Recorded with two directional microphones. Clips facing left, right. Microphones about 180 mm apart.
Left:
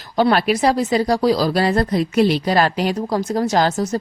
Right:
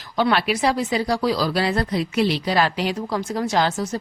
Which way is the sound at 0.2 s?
40° left (ahead or behind).